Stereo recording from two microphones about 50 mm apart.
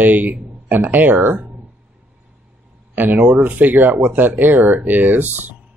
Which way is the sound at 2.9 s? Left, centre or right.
Right.